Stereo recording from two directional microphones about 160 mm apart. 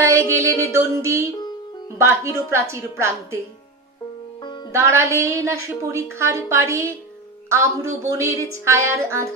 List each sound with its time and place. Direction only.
0.4 s a woman's voice: 20° right (ahead or behind)
4.4 s music: 25° left (ahead or behind)
4.7 s a woman's voice: 15° right (ahead or behind)